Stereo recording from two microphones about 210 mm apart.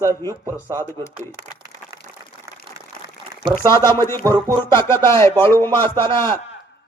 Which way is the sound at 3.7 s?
15° left (ahead or behind).